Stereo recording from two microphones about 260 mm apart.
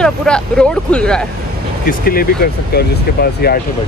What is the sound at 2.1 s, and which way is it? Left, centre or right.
Speech, left.